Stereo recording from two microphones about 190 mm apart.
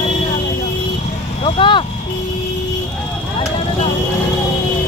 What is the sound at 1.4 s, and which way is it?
Vehicle, 25° left (ahead or behind).